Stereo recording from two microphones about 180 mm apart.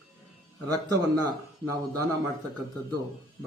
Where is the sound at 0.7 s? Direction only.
20° right (ahead or behind).